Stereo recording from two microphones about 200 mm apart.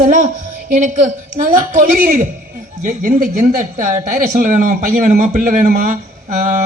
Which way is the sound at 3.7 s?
40° right (ahead or behind).